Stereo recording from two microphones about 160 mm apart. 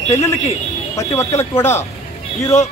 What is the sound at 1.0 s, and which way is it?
Speech, 15° left (ahead or behind).